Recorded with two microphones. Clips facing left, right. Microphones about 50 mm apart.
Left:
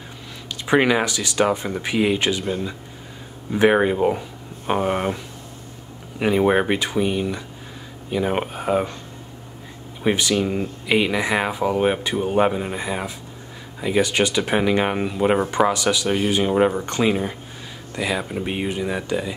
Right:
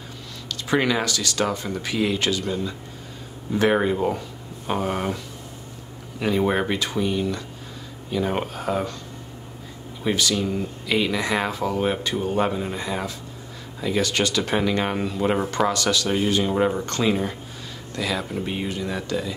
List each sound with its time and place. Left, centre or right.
0.5 s speech: left
10.0 s speech: left